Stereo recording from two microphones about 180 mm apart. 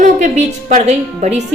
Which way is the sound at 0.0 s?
40° right (ahead or behind).